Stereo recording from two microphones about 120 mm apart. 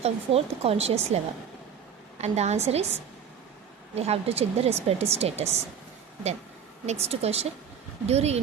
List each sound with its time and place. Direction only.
0.0 s speech: 55° right (ahead or behind)
6.8 s speech: 60° right (ahead or behind)